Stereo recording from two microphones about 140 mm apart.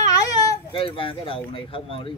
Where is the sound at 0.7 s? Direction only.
40° left (ahead or behind).